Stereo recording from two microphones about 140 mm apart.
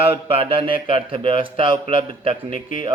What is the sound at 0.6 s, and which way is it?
Speech, 40° right (ahead or behind).